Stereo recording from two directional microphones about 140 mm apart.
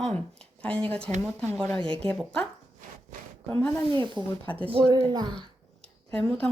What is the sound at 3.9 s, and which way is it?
Speech, 30° right (ahead or behind).